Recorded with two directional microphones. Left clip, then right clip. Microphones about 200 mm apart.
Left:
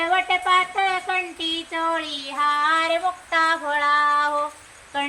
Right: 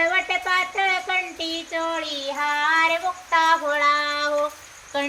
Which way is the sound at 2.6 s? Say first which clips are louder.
Right 4 dB; 15° right (ahead or behind).